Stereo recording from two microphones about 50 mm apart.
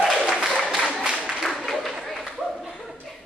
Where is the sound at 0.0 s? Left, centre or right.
Centre.